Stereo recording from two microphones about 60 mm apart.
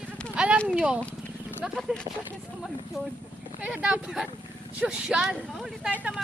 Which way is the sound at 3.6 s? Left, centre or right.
Centre.